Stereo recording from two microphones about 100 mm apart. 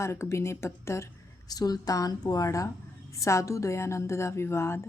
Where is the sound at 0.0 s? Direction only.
30° left (ahead or behind).